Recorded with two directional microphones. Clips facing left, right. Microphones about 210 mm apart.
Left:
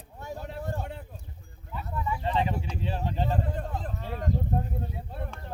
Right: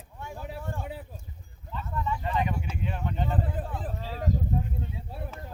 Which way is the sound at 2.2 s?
30° left (ahead or behind).